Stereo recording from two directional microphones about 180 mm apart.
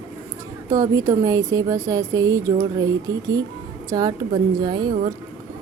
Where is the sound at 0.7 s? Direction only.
20° right (ahead or behind).